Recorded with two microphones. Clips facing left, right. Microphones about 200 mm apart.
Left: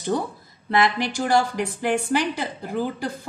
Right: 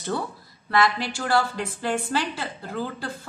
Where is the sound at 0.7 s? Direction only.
20° left (ahead or behind).